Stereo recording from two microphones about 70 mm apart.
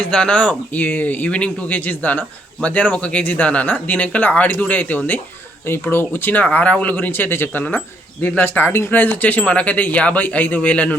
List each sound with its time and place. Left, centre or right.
0.0 s speech: centre; by 9.0 s left
9.0 s speech: left